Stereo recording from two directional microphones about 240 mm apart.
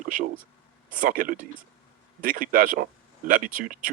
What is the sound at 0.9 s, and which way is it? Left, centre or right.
Speech, right.